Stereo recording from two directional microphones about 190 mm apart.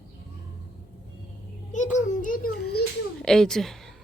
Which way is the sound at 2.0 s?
45° left (ahead or behind).